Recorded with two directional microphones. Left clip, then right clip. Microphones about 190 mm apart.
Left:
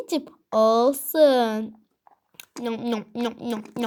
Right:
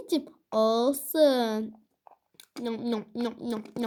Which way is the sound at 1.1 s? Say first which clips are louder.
Left 5 dB; 30° left (ahead or behind).